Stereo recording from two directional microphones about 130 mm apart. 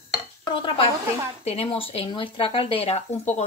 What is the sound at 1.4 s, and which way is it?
Speech, 50° left (ahead or behind).